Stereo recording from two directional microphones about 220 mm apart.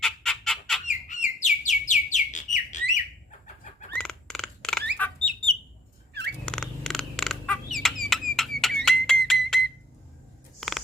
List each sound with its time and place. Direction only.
0.0 s chicken: centre (ahead or behind)
0.9 s bird: 35° left (ahead or behind)
3.4 s chicken: 35° left (ahead or behind)
3.9 s a sound: 5° left (ahead or behind)
4.9 s chicken: 5° left (ahead or behind)
6.4 s a sound: 5° left (ahead or behind)
8.8 s music: centre (ahead or behind)